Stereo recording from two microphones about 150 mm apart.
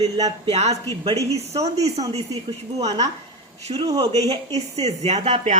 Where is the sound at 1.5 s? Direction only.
45° right (ahead or behind).